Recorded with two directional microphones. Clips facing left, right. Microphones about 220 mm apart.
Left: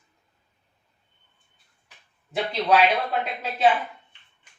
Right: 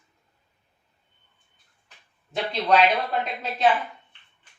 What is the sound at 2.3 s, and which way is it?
Speech, 5° left (ahead or behind).